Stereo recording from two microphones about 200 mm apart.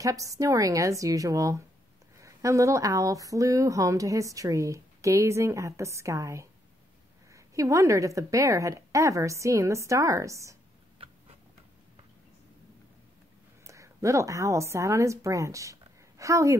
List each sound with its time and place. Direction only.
0.0 s speech: 15° right (ahead or behind)
11.0 s tick-tock: 25° right (ahead or behind)
13.7 s a woman's voice: 15° right (ahead or behind)